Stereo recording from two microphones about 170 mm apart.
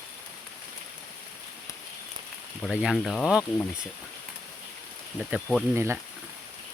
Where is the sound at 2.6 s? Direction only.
Centre (ahead or behind).